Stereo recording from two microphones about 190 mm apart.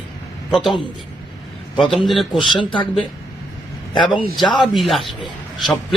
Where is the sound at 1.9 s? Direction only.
Centre (ahead or behind).